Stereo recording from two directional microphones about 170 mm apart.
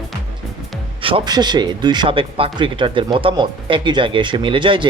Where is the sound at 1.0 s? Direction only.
30° right (ahead or behind).